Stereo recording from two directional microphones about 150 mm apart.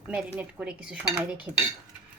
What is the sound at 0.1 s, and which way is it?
Dishes, 10° right (ahead or behind).